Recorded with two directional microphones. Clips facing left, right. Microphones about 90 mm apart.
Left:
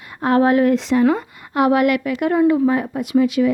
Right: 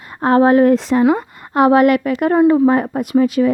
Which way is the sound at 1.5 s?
35° right (ahead or behind).